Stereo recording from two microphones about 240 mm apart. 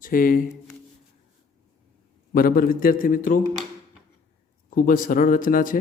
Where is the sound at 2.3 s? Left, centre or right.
Left.